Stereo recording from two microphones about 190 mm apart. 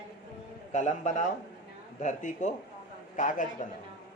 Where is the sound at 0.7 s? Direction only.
40° left (ahead or behind).